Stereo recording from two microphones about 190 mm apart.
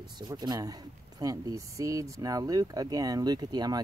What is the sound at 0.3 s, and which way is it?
Speech, 20° right (ahead or behind).